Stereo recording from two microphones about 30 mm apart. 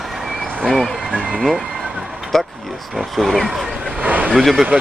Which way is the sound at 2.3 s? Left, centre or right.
Centre.